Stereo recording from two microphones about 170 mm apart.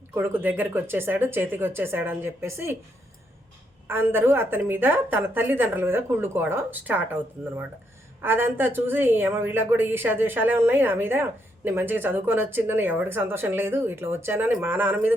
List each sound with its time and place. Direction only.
0.1 s a woman's voice: 10° right (ahead or behind)
3.8 s a woman's voice: 15° right (ahead or behind)